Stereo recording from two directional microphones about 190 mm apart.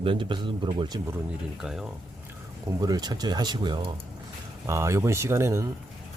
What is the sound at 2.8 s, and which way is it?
Speech, 20° right (ahead or behind).